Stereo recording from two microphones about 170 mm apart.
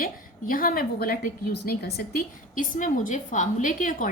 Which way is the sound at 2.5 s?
50° left (ahead or behind).